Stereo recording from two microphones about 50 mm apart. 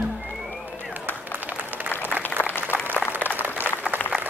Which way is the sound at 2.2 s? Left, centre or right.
Left.